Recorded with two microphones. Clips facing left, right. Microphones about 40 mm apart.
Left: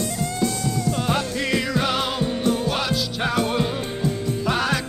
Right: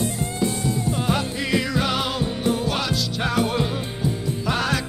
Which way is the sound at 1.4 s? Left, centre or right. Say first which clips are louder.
Even; centre.